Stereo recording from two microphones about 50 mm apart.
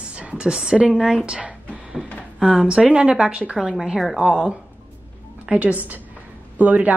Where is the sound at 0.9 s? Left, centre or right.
Centre.